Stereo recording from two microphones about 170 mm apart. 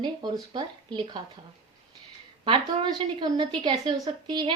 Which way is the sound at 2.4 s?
30° right (ahead or behind).